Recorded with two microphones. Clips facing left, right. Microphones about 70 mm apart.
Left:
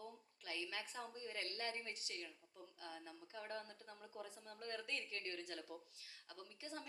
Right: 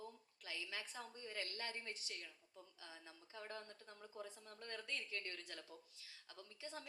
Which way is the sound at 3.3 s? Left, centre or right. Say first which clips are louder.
Left 2 dB; left.